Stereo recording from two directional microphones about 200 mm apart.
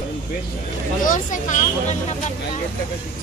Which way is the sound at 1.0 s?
40° left (ahead or behind).